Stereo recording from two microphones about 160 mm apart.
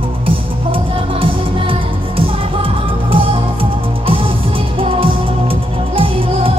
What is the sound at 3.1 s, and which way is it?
Music, 35° right (ahead or behind).